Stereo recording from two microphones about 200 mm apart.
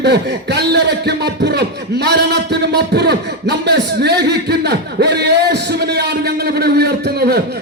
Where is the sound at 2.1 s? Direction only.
55° right (ahead or behind).